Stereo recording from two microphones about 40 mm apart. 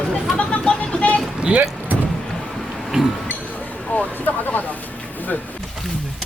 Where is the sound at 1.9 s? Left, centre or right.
Right.